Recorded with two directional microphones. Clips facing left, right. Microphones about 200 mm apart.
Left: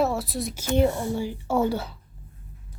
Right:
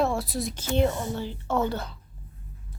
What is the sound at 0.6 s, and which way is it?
Speech, 10° left (ahead or behind).